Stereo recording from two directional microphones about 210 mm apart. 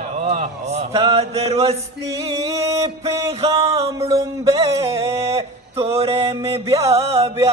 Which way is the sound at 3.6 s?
30° right (ahead or behind).